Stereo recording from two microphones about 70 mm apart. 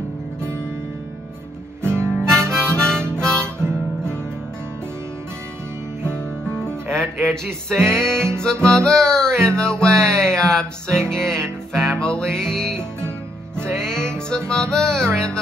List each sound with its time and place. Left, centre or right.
1.8 s guitar: right
2.1 s harmonica: centre
6.1 s music: centre